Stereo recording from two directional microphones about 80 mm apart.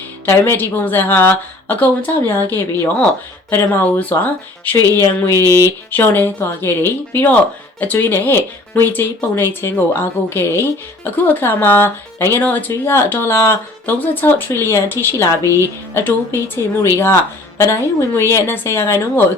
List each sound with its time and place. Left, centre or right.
0.3 s speech: left
14.0 s a woman's voice: left
17.6 s a woman's voice: left